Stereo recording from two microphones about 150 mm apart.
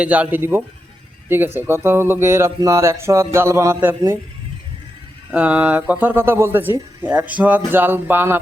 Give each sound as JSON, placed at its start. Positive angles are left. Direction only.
{"t": 0.0, "sound": "speech", "side_deg": -10}
{"t": 5.3, "sound": "speech", "side_deg": -10}